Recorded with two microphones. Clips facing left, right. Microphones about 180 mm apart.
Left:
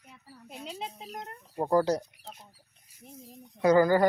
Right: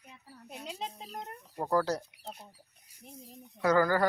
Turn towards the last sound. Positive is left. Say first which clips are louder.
# left 5 dB
turn(degrees=20)  # may be behind; listen again after turning